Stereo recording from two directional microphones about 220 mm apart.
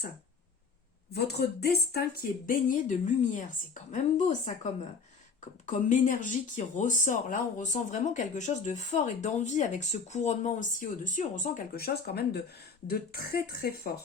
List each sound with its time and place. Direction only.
1.1 s speech: 45° left (ahead or behind)